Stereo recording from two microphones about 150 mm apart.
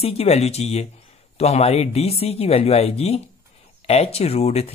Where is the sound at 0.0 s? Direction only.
45° left (ahead or behind).